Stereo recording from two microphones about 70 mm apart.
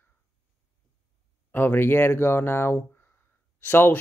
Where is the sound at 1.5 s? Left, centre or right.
Left.